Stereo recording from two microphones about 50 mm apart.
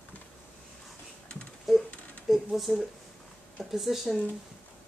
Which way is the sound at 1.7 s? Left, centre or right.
Centre.